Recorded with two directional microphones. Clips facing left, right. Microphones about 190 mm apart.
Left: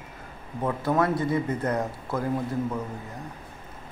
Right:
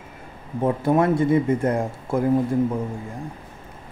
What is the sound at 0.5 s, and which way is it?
Speech, 25° right (ahead or behind).